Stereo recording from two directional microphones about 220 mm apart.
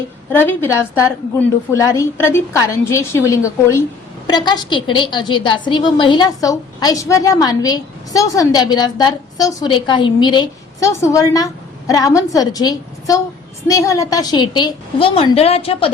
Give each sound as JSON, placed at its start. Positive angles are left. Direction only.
{"t": 0.3, "sound": "a woman's voice", "side_deg": 10}